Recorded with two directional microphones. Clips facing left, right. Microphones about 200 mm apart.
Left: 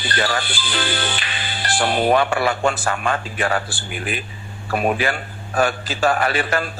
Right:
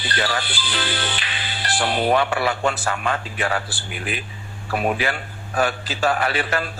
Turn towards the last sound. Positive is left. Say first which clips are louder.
# left 2 dB
turn(degrees=45)  # may be behind; listen again after turning